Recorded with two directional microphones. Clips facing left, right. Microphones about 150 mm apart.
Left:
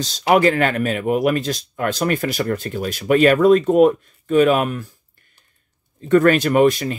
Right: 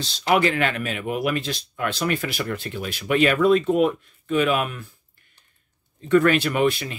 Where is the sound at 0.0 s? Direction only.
45° left (ahead or behind).